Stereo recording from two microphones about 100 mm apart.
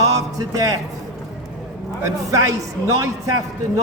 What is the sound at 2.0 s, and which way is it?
A man's voice, 30° right (ahead or behind).